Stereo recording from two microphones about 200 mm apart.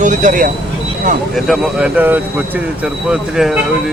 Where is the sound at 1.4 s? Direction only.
5° right (ahead or behind).